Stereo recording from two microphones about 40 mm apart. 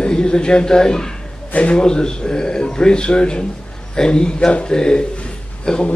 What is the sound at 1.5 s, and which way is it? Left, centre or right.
A man's voice, left.